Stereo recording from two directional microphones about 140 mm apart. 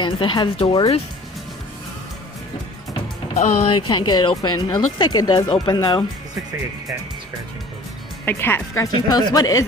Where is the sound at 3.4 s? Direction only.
45° left (ahead or behind).